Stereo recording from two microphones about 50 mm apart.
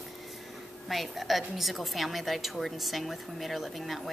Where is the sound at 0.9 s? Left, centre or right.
Centre.